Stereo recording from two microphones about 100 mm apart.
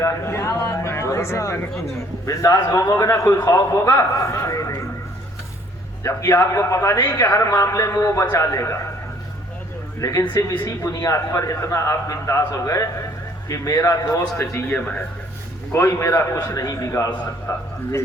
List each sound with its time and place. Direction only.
0.0 s a man's voice: 30° left (ahead or behind)
6.0 s a man's voice: 30° left (ahead or behind)
10.0 s a man's voice: 35° left (ahead or behind)
14.8 s speech: 10° left (ahead or behind)
15.7 s a man's voice: 30° left (ahead or behind)